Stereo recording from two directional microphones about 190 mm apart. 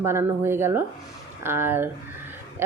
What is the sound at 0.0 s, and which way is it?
A woman's voice, 15° right (ahead or behind).